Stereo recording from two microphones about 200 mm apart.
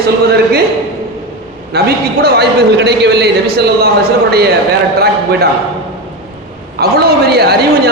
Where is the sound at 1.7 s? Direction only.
55° right (ahead or behind).